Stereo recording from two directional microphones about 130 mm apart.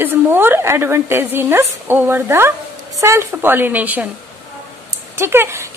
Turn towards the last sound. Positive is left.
turn(degrees=-20)  # may be behind; listen again after turning